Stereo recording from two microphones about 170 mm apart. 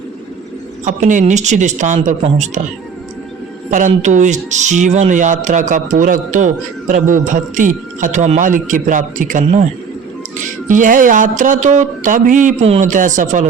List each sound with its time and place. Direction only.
0.9 s speech: 45° right (ahead or behind)
3.7 s speech: 45° right (ahead or behind)
10.7 s speech: 50° right (ahead or behind)